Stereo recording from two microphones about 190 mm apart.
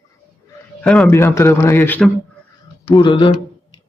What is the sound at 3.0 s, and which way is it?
Speech, 25° left (ahead or behind).